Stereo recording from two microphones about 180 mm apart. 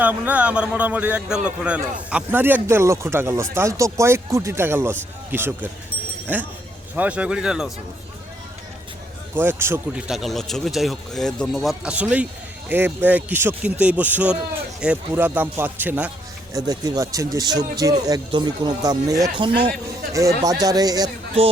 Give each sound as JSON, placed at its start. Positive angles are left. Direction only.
{"t": 0.0, "sound": "a man's voice", "side_deg": -10}
{"t": 9.3, "sound": "a man's voice", "side_deg": -10}
{"t": 16.5, "sound": "speech", "side_deg": -20}